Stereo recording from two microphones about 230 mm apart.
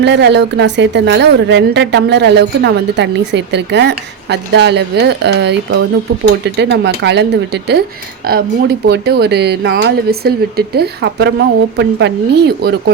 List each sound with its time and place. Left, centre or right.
0.0 s speech: right